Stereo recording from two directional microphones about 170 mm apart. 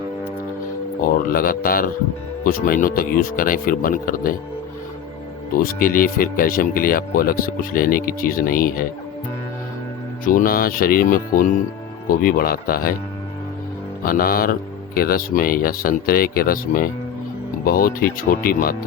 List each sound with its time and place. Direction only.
1.3 s speech: 60° left (ahead or behind)
5.6 s speech: 55° left (ahead or behind)
10.2 s speech: 55° left (ahead or behind)
14.0 s speech: 60° left (ahead or behind)